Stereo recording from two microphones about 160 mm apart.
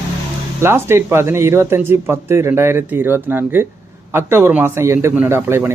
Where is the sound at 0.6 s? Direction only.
15° right (ahead or behind).